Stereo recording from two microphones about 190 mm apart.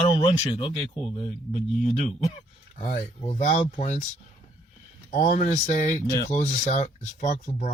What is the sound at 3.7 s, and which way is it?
Speech, 35° left (ahead or behind).